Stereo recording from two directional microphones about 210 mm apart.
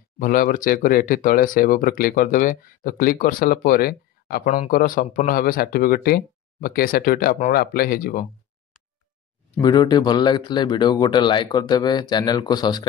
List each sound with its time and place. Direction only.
0.2 s speech: 40° left (ahead or behind)
9.6 s speech: 20° left (ahead or behind)